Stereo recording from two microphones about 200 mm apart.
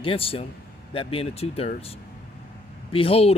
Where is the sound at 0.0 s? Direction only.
25° left (ahead or behind).